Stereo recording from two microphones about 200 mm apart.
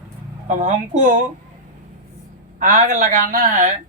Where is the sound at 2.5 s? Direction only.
40° right (ahead or behind).